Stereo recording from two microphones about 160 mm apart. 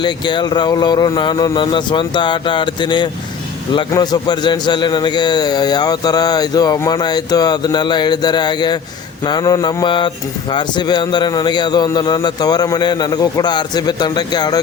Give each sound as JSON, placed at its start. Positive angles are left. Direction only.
{"t": 0.0, "sound": "a man's voice", "side_deg": 30}